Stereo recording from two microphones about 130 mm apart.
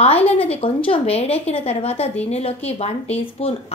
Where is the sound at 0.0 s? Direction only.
50° left (ahead or behind).